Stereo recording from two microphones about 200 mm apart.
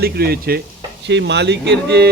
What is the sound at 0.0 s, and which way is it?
Speech, 50° right (ahead or behind).